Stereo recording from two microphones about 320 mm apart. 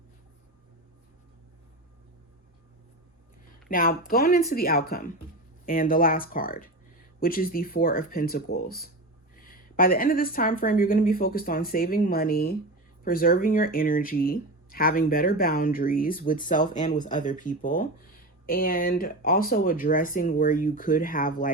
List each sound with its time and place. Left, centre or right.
3.7 s speech: left